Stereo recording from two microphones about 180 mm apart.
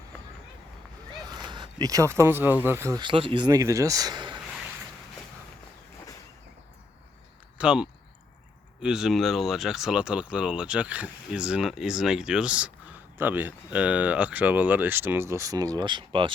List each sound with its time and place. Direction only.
1.3 s speech: 25° right (ahead or behind)
3.0 s speech: 30° right (ahead or behind)
7.6 s speech: 5° right (ahead or behind); by 16.3 s 25° right (ahead or behind)